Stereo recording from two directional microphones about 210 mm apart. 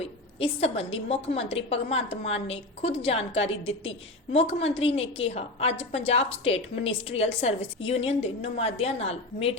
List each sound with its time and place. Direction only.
0.0 s a woman's voice: 30° left (ahead or behind)